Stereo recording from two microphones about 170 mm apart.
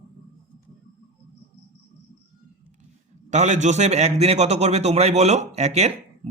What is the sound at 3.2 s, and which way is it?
A man's voice, 45° right (ahead or behind).